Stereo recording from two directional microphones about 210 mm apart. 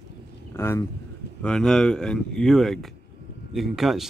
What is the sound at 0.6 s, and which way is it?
Speech, 10° left (ahead or behind).